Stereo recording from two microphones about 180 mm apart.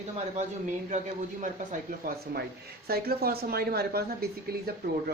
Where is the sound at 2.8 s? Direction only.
60° right (ahead or behind).